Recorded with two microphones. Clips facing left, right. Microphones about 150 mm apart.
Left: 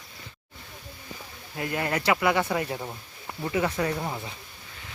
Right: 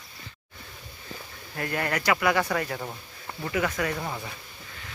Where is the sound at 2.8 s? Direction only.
Centre (ahead or behind).